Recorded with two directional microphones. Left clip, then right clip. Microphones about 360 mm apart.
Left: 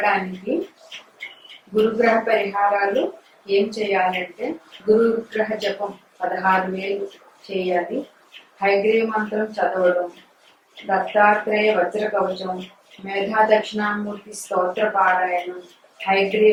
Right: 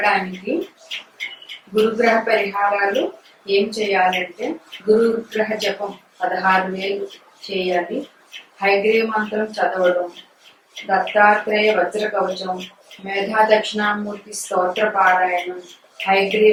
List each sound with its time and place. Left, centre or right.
0.0 s speech: centre
1.8 s speech: centre
7.4 s speech: left
8.5 s speech: centre
12.3 s speech: centre